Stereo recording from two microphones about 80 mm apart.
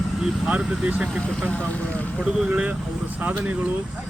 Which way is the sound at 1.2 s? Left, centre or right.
Centre.